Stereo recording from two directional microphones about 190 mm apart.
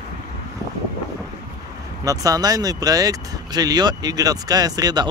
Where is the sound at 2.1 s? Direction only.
20° right (ahead or behind).